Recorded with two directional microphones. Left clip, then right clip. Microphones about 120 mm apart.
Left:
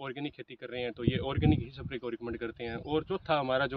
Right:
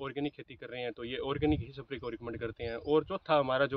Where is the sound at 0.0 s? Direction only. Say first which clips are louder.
Right 2 dB; 25° right (ahead or behind).